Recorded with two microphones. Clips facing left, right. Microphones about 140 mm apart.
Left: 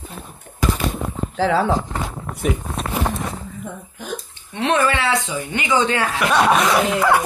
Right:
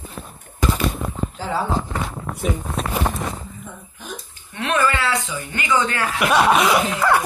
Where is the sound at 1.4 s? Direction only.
80° left.